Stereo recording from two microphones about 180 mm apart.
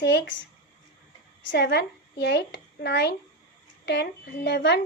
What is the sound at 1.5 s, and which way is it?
A woman's voice, 65° left (ahead or behind).